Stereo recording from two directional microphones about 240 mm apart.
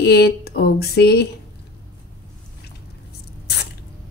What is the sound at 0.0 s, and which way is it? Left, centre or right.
Speech, left.